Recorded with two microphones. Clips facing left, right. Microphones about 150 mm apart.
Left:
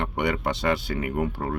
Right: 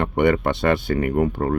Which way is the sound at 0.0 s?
50° right (ahead or behind).